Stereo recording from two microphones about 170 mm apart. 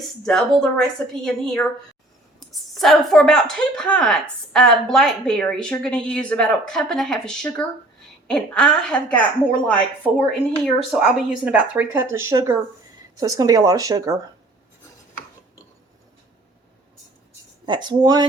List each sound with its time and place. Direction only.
0.3 s a woman's voice: centre (ahead or behind)
10.8 s speech: 5° right (ahead or behind)
17.7 s speech: 25° right (ahead or behind)